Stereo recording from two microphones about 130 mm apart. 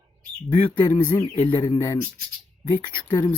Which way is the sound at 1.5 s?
35° left (ahead or behind).